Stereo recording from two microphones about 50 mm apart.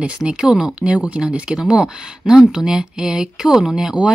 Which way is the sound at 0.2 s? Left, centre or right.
Centre.